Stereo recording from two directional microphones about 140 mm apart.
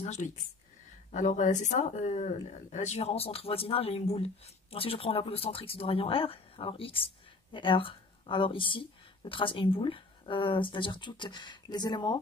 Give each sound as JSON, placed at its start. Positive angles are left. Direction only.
{"t": 0.0, "sound": "speech", "side_deg": 55}